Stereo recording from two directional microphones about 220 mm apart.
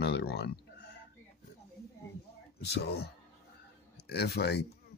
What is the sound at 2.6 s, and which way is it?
Speech, 50° left (ahead or behind).